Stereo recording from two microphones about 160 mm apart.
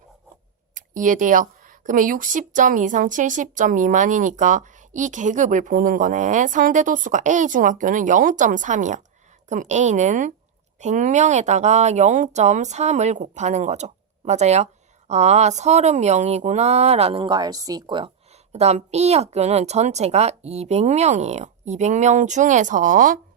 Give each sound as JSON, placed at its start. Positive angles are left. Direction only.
{"t": 0.7, "sound": "speech", "side_deg": -55}
{"t": 18.5, "sound": "speech", "side_deg": -45}